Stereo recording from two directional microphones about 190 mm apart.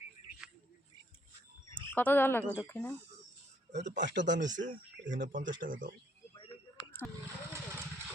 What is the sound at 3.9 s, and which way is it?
Speech, 70° right (ahead or behind).